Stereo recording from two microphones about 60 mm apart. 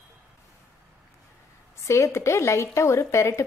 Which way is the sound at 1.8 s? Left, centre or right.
Left.